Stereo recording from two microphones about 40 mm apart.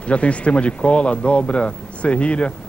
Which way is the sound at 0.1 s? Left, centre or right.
Left.